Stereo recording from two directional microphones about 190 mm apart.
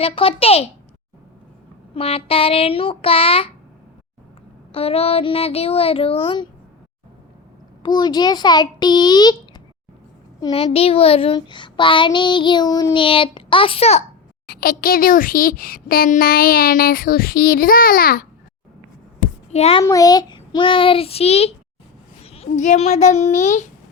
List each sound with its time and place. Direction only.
0.0 s a child's voice: 30° left (ahead or behind)
2.0 s child singing: 30° left (ahead or behind)
4.7 s a child's voice: 30° left (ahead or behind)
7.8 s child singing: 20° left (ahead or behind)
14.4 s speech: 50° left (ahead or behind)
19.5 s a child's voice: 35° left (ahead or behind)
19.8 s child singing: 20° left (ahead or behind); by 21.5 s 35° left (ahead or behind)
22.2 s a child's voice: 30° left (ahead or behind)